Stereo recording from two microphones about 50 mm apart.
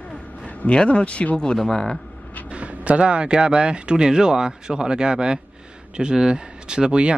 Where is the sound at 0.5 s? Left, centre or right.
Left.